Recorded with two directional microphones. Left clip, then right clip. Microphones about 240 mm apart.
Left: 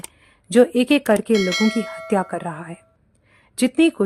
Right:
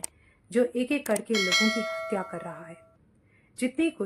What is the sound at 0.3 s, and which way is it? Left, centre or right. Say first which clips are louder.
Speech: left 11 dB; left.